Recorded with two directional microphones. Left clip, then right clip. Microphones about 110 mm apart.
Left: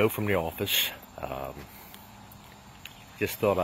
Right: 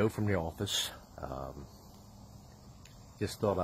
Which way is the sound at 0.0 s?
Centre (ahead or behind).